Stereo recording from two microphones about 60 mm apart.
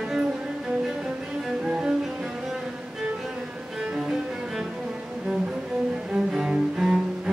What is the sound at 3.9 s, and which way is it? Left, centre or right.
Cello, centre.